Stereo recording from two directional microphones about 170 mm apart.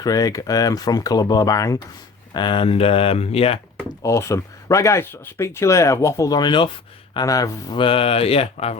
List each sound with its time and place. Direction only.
0.0 s speech: 20° left (ahead or behind)
4.0 s speech: 15° left (ahead or behind); by 8.8 s 40° left (ahead or behind)